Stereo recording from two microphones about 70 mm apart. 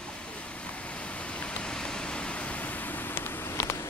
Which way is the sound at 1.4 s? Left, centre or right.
Centre.